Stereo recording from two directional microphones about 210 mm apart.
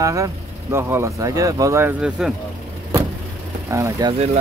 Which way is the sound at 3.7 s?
15° right (ahead or behind).